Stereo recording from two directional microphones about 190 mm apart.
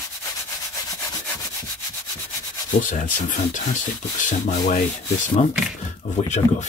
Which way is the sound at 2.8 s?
45° left (ahead or behind).